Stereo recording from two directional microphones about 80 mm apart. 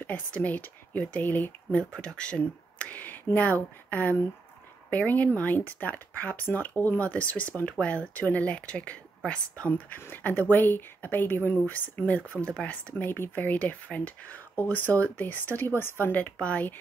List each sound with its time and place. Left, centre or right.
0.0 s speech: left